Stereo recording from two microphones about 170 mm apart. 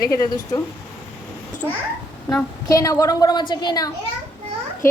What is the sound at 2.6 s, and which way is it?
A woman's voice, 20° left (ahead or behind).